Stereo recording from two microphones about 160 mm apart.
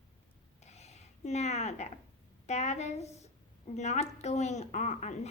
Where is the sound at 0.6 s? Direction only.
45° left (ahead or behind).